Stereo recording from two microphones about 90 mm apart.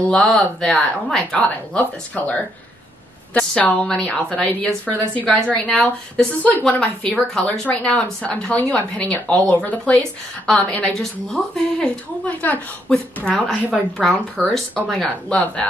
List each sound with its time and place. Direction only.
0.2 s a woman's voice: 5° left (ahead or behind)
12.3 s a woman's voice: 15° left (ahead or behind)